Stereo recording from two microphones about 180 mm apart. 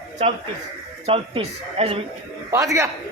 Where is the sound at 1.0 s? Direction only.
35° right (ahead or behind).